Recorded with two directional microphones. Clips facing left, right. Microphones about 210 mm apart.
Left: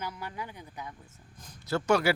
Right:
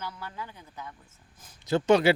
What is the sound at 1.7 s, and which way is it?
Speech, 20° right (ahead or behind).